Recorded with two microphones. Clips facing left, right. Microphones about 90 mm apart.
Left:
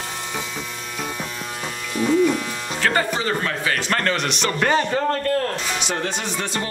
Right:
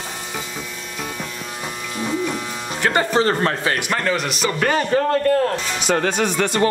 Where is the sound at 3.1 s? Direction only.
40° right (ahead or behind).